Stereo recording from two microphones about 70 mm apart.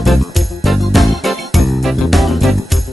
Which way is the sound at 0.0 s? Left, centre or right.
Centre.